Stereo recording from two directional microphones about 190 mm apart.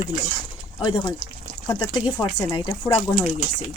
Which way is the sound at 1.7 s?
20° left (ahead or behind).